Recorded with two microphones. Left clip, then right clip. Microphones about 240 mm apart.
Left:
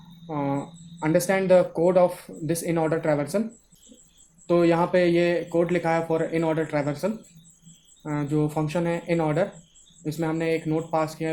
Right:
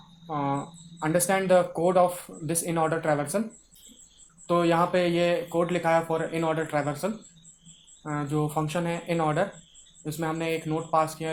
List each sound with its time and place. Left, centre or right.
0.3 s speech: centre
4.4 s speech: centre